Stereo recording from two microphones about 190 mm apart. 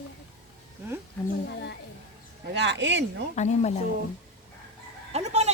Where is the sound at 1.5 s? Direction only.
65° left (ahead or behind).